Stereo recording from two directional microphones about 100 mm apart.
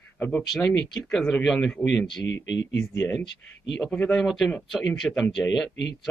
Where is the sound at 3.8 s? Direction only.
10° left (ahead or behind).